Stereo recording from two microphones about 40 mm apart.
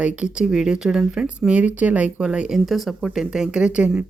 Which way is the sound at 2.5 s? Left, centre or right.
Centre.